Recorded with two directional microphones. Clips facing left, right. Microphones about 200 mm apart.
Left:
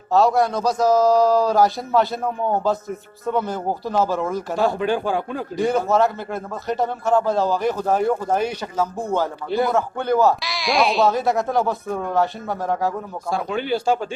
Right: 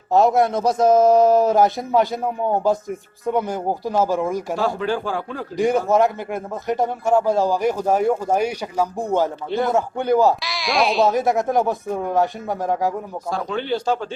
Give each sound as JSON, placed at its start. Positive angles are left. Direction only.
{"t": 0.1, "sound": "a man's voice", "side_deg": -20}
{"t": 4.5, "sound": "speech", "side_deg": 20}
{"t": 5.5, "sound": "a man's voice", "side_deg": -15}
{"t": 10.4, "sound": "speech", "side_deg": 0}
{"t": 11.1, "sound": "a man's voice", "side_deg": -20}
{"t": 13.3, "sound": "speech", "side_deg": 10}